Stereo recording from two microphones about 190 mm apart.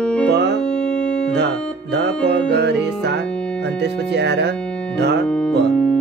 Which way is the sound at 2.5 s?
60° right (ahead or behind).